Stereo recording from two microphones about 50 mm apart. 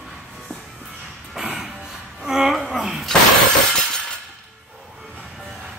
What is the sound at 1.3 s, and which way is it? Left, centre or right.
Music, centre.